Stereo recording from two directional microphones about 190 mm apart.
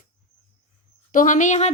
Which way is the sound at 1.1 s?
45° left (ahead or behind).